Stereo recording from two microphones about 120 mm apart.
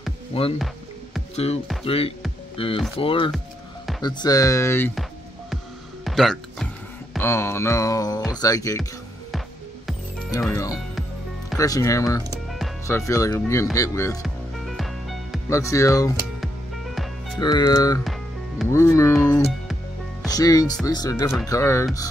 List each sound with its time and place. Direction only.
0.3 s speech: 55° left (ahead or behind)
4.0 s music: 35° left (ahead or behind); by 4.9 s 20° left (ahead or behind)
6.0 s music: centre (ahead or behind)
7.2 s music: 20° left (ahead or behind)
11.5 s music: 30° left (ahead or behind)
12.4 s music: centre (ahead or behind)
12.8 s music: 25° left (ahead or behind)
14.2 s music: centre (ahead or behind)
15.5 s music: 25° left (ahead or behind)
16.3 s music: centre (ahead or behind)
17.4 s speech: 35° left (ahead or behind)
18.0 s music: centre (ahead or behind)
18.7 s music: 25° left (ahead or behind)
20.2 s music: 30° left (ahead or behind)